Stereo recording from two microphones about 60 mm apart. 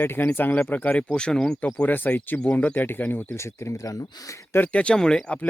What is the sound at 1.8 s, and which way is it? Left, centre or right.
Speech, left.